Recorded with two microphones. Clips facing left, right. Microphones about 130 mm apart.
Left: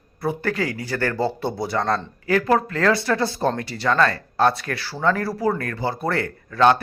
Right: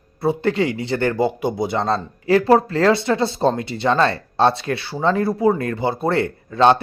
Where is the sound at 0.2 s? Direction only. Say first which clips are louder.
Right 5 dB; 25° right (ahead or behind).